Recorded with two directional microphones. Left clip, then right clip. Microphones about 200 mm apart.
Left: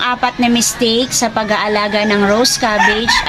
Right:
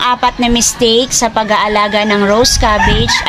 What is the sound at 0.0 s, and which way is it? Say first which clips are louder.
A woman's voice: right 3 dB; 30° right (ahead or behind).